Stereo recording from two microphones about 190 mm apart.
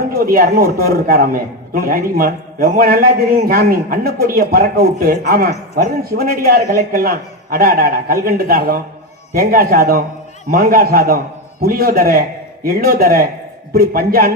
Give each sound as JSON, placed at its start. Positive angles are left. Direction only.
{"t": 0.1, "sound": "a man's voice", "side_deg": -50}